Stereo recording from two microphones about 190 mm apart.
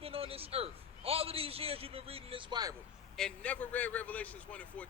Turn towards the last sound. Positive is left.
turn(degrees=5)  # may be behind; listen again after turning